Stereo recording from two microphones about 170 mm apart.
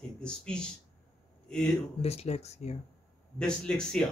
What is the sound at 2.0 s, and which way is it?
Speech, 40° left (ahead or behind).